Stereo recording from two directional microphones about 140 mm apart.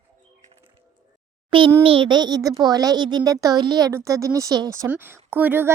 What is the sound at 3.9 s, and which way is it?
A woman's voice, 20° right (ahead or behind).